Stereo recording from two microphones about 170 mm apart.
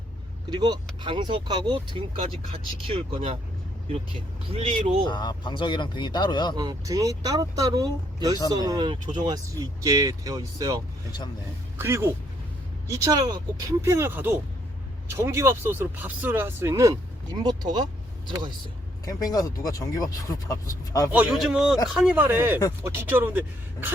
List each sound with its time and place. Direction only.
0.5 s speech: 25° right (ahead or behind)
5.0 s speech: 25° left (ahead or behind)
6.6 s speech: 20° right (ahead or behind)
11.8 s speech: 15° right (ahead or behind)
19.0 s speech: 20° left (ahead or behind)
21.1 s speech: 10° right (ahead or behind)